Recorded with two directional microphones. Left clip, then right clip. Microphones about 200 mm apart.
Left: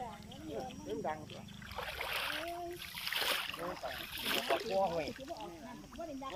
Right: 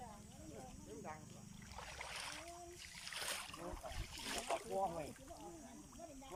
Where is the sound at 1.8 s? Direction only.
45° left (ahead or behind).